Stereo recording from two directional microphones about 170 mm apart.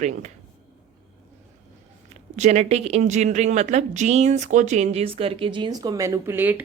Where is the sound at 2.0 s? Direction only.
45° right (ahead or behind).